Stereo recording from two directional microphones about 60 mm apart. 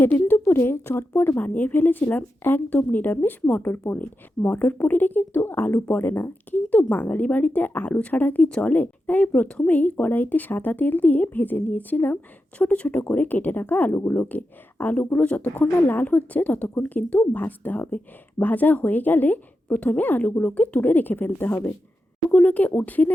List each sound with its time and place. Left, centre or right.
0.0 s a woman's voice: left; by 8.7 s centre
8.7 s speech: left